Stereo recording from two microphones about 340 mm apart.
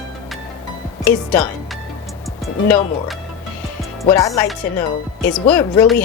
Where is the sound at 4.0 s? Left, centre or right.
Centre.